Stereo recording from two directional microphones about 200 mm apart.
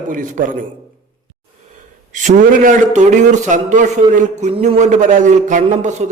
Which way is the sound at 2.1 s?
40° right (ahead or behind).